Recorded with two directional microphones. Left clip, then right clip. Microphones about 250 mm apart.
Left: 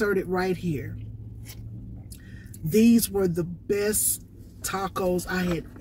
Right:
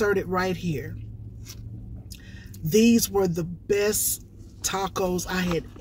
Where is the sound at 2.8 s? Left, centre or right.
Centre.